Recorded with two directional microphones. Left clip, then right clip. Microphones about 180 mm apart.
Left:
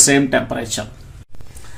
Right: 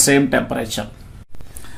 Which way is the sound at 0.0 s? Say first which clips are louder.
Left 1 dB; 15° right (ahead or behind).